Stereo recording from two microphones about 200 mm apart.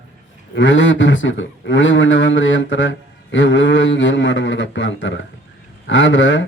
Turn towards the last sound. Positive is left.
turn(degrees=65)  # may be behind; listen again after turning